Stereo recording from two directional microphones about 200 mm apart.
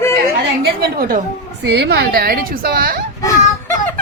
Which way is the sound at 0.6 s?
50° right (ahead or behind).